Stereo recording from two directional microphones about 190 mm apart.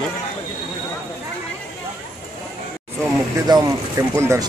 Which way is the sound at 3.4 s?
20° right (ahead or behind).